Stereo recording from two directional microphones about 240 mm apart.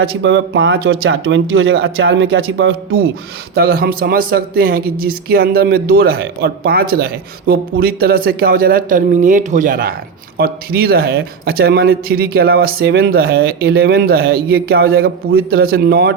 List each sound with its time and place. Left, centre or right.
0.0 s speech: right
3.5 s a man's voice: right